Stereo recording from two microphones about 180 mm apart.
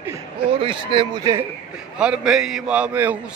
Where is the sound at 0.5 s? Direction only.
30° right (ahead or behind).